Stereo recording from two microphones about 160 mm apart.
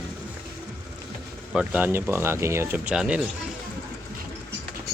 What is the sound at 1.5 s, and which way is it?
Speech, 5° right (ahead or behind).